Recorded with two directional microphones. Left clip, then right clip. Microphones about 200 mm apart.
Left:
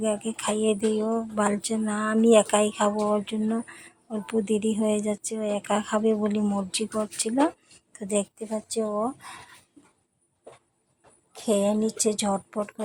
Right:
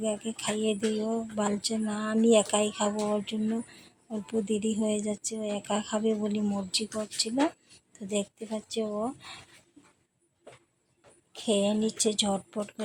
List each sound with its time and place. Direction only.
0.0 s speech: 15° left (ahead or behind)
11.3 s speech: 10° left (ahead or behind)